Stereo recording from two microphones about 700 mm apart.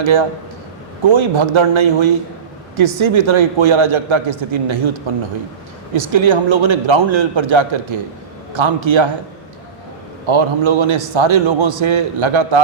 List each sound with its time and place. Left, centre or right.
0.0 s a man's voice: right
10.2 s a man's voice: right